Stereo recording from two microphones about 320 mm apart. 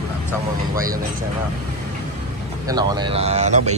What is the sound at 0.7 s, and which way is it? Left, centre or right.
Speech, centre.